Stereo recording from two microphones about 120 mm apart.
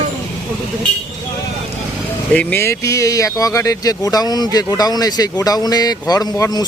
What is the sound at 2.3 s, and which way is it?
A man's voice, 20° left (ahead or behind).